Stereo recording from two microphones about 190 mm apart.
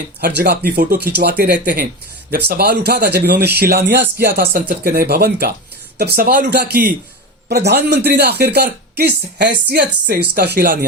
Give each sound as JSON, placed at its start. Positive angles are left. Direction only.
{"t": 0.2, "sound": "speech", "side_deg": -60}